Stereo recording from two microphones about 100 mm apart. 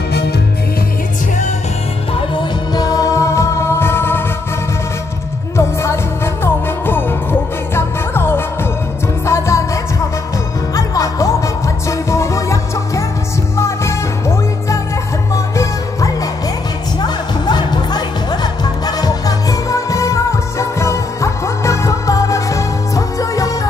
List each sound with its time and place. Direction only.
2.1 s music: 50° left (ahead or behind); by 4.2 s 25° left (ahead or behind)
5.6 s music: 25° left (ahead or behind)
17.0 s music: 45° left (ahead or behind)